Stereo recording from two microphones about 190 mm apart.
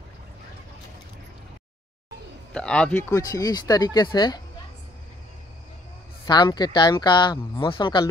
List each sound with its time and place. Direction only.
2.5 s speech: 5° left (ahead or behind); by 4.4 s 20° left (ahead or behind)
6.2 s speech: 20° left (ahead or behind)